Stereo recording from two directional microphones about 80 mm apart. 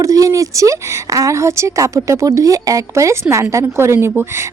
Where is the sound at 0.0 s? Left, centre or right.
Right.